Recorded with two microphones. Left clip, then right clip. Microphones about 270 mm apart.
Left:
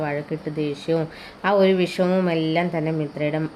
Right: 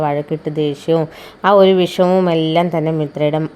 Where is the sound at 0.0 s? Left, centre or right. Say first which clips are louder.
Right 8 dB; right.